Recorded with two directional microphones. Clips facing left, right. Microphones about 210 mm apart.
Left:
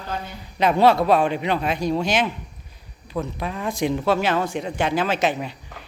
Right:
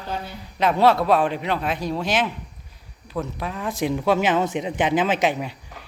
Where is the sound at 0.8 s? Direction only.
Centre (ahead or behind).